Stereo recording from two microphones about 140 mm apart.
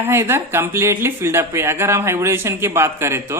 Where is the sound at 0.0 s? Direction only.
20° right (ahead or behind).